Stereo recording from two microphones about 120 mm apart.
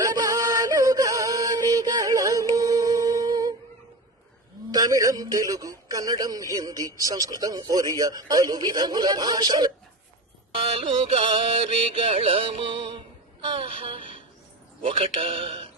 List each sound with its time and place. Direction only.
0.0 s music: 30° right (ahead or behind)
4.7 s a man's voice: 30° right (ahead or behind)
10.5 s music: 55° right (ahead or behind)
14.8 s a man's voice: 50° right (ahead or behind)